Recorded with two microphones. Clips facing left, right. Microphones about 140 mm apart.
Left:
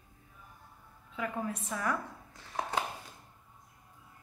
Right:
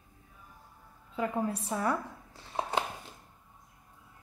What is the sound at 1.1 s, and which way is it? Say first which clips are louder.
Speech: right 4 dB; 35° right (ahead or behind).